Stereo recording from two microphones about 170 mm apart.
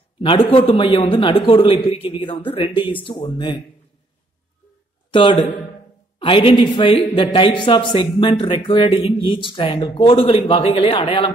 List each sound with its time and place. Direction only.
0.2 s speech: 30° left (ahead or behind)
6.1 s speech: 30° left (ahead or behind)